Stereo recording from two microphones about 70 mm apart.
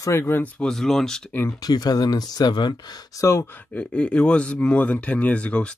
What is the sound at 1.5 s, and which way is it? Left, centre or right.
Speech, left.